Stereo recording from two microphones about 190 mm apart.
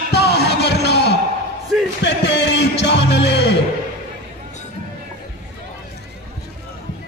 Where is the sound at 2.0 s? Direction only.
65° left (ahead or behind).